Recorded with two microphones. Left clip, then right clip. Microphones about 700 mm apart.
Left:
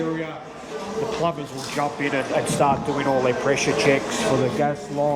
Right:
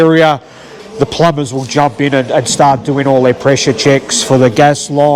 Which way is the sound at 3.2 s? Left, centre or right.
Right.